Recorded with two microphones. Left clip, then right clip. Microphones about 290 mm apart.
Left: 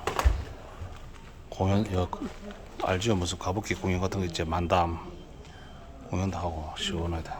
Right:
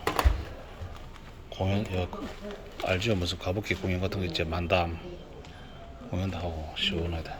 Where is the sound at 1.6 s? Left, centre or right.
Left.